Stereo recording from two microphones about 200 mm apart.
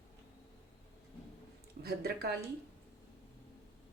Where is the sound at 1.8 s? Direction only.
50° right (ahead or behind).